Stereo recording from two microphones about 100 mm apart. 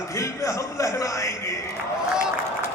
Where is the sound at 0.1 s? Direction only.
30° left (ahead or behind).